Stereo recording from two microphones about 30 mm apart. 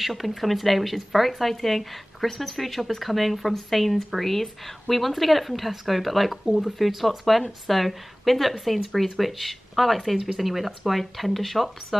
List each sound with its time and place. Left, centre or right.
0.0 s speech: centre